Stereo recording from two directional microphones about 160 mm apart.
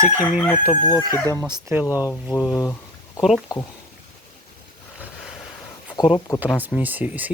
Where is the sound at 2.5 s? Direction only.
25° left (ahead or behind).